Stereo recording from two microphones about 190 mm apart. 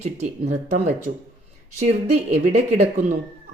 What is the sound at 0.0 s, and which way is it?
Speech, 35° right (ahead or behind).